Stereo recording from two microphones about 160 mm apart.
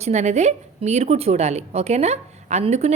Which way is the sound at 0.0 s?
45° right (ahead or behind).